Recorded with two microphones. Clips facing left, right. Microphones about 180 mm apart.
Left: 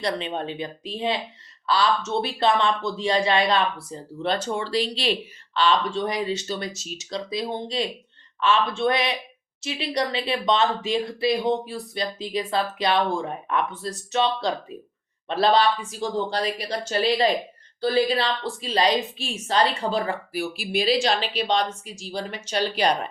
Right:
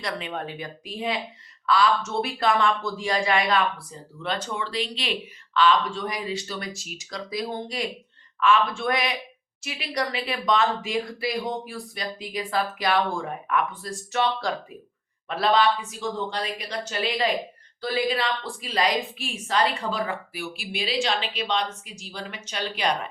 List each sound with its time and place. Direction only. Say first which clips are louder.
0.1 s a woman's voice: left 4 dB; 25° left (ahead or behind)